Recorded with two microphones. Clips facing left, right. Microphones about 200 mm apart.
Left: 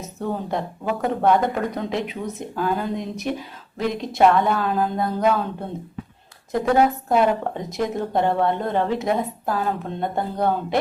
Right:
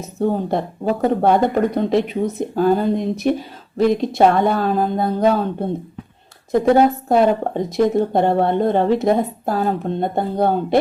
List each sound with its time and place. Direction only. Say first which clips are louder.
0.2 s a woman's voice: right 7 dB; 35° right (ahead or behind)